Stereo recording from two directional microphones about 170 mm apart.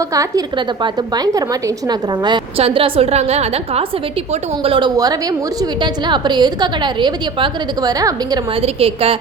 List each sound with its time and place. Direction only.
0.0 s a woman's voice: 20° right (ahead or behind)
8.5 s a woman's voice: 35° right (ahead or behind)